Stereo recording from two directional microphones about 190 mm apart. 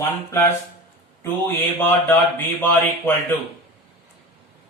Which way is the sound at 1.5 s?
10° left (ahead or behind).